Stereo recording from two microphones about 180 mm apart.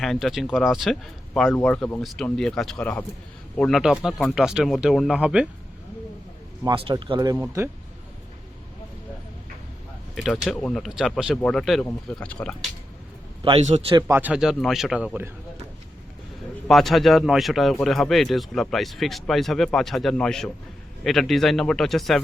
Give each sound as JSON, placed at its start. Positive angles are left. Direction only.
{"t": 0.0, "sound": "speech", "side_deg": 0}
{"t": 6.7, "sound": "speech", "side_deg": -25}
{"t": 10.2, "sound": "speech", "side_deg": 0}
{"t": 13.4, "sound": "a man's voice", "side_deg": -35}
{"t": 14.1, "sound": "speech", "side_deg": -10}
{"t": 16.6, "sound": "speech", "side_deg": 0}